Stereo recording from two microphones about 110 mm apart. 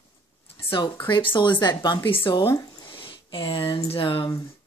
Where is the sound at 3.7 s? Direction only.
50° left (ahead or behind).